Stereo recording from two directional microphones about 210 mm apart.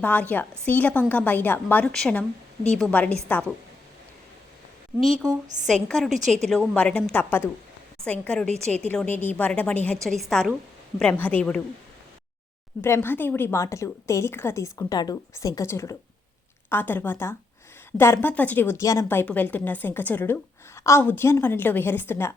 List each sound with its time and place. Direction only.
0.0 s a woman's voice: 10° left (ahead or behind)
4.9 s a woman's voice: centre (ahead or behind)
6.1 s a woman's voice: 35° right (ahead or behind)
6.5 s a woman's voice: 5° left (ahead or behind)
12.8 s a woman's voice: 10° left (ahead or behind)